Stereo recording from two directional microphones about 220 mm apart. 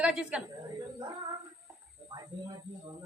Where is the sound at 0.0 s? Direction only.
5° right (ahead or behind).